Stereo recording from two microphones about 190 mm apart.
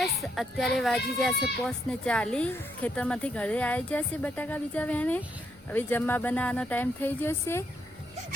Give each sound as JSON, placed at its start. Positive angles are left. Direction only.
{"t": 0.0, "sound": "speech", "side_deg": 0}